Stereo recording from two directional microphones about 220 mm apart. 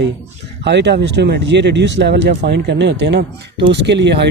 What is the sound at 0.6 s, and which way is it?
Speech, 50° right (ahead or behind).